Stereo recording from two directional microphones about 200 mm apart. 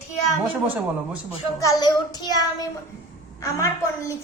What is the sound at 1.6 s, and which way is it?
A child's voice, 15° left (ahead or behind).